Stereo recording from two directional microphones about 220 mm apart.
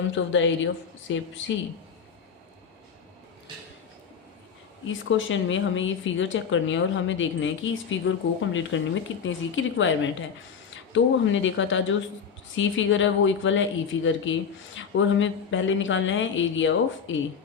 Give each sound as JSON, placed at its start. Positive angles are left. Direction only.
{"t": 0.3, "sound": "speech", "side_deg": 60}
{"t": 4.9, "sound": "speech", "side_deg": 60}